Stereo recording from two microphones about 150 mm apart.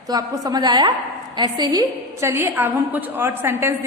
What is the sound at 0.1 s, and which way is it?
A woman's voice, 25° right (ahead or behind).